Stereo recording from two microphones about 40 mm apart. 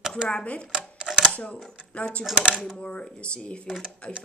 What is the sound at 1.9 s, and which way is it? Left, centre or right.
Speech, left.